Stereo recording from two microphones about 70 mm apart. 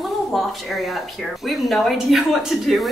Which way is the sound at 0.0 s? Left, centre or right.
Centre.